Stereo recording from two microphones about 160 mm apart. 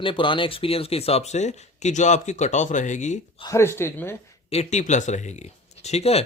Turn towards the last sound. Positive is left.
turn(degrees=40)  # may be behind; listen again after turning